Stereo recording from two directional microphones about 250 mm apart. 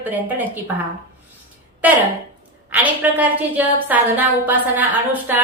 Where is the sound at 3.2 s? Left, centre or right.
Centre.